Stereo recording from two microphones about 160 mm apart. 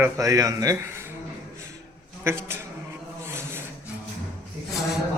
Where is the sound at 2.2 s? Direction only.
15° right (ahead or behind).